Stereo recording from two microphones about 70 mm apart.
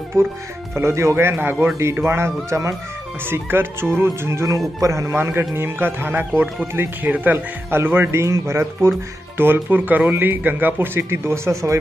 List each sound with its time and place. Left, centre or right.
0.2 s speech: right
9.4 s speech: right